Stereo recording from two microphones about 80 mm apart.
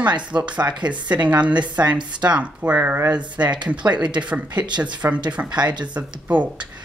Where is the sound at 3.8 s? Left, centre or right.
Right.